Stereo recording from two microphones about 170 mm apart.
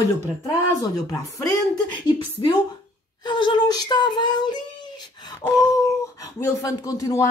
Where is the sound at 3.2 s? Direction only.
25° left (ahead or behind).